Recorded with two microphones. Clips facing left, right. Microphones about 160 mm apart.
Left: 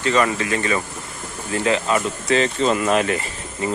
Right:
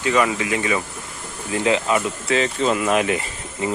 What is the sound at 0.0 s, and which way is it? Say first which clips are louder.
Speech: even; 10° right (ahead or behind).